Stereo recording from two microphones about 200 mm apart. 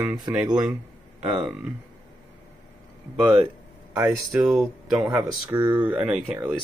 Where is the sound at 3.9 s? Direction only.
15° right (ahead or behind).